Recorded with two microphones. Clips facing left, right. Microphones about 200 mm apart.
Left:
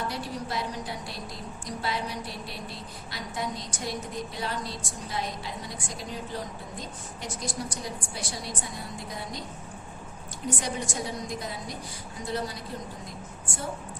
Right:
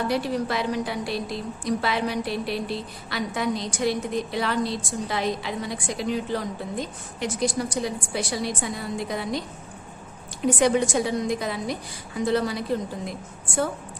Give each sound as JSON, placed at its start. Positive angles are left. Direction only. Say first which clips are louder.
{"t": 0.1, "sound": "a woman's voice", "louder": "right 8 dB", "side_deg": -75}
{"t": 10.4, "sound": "a woman's voice", "louder": "right 11 dB", "side_deg": -75}